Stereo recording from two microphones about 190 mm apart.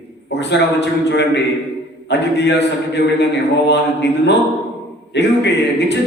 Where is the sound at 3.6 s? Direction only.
65° left (ahead or behind).